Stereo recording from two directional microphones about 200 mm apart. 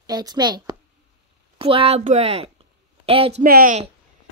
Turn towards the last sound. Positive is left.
turn(degrees=-40)  # may be behind; listen again after turning